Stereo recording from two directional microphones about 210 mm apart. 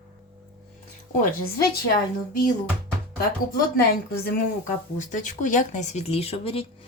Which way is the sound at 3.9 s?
40° left (ahead or behind).